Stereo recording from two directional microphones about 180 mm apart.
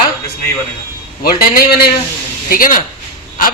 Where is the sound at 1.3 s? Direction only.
55° left (ahead or behind).